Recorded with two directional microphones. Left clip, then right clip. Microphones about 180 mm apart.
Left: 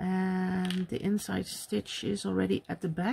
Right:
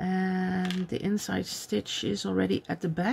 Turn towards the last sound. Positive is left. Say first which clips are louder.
# right 3 dB
turn(degrees=10)  # may be behind; listen again after turning